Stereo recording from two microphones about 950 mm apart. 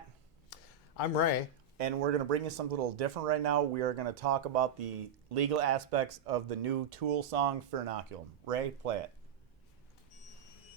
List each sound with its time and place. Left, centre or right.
0.5 s a sound: left
0.9 s speech: left
1.8 s speech: right